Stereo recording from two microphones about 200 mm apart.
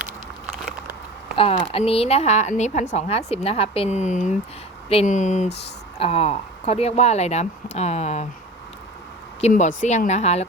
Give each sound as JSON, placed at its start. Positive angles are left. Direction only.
{"t": 1.4, "sound": "a woman's voice", "side_deg": 30}
{"t": 9.4, "sound": "a woman's voice", "side_deg": 40}